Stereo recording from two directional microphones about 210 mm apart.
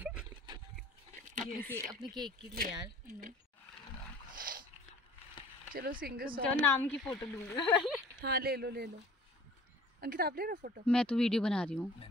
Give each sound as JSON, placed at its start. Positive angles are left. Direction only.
{"t": 0.0, "sound": "dog", "side_deg": -5}
{"t": 1.4, "sound": "speech", "side_deg": 10}
{"t": 2.5, "sound": "speech", "side_deg": -45}
{"t": 4.4, "sound": "a sound", "side_deg": -45}
{"t": 5.8, "sound": "speech", "side_deg": -45}
{"t": 6.6, "sound": "speech", "side_deg": 5}
{"t": 7.2, "sound": "speech", "side_deg": 20}
{"t": 8.2, "sound": "speech", "side_deg": -45}
{"t": 9.9, "sound": "speech", "side_deg": -45}
{"t": 10.9, "sound": "speech", "side_deg": 5}